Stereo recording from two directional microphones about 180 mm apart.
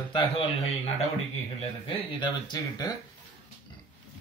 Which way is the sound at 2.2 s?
20° left (ahead or behind).